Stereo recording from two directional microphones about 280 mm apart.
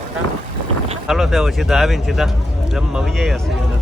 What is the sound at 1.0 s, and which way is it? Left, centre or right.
Speech, centre.